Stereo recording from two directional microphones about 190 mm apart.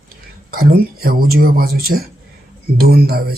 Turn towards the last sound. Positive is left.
turn(degrees=-55)  # may be behind; listen again after turning